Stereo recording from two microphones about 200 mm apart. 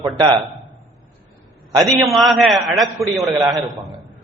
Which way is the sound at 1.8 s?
Centre (ahead or behind).